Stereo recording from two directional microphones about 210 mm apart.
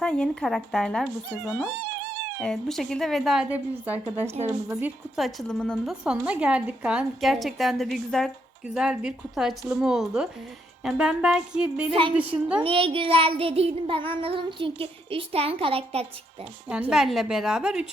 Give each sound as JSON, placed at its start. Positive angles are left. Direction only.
{"t": 0.0, "sound": "a woman's voice", "side_deg": 5}
{"t": 12.6, "sound": "child singing", "side_deg": -25}
{"t": 16.9, "sound": "a woman's voice", "side_deg": 0}